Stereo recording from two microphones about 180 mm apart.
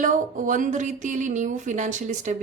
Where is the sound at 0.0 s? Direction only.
45° right (ahead or behind).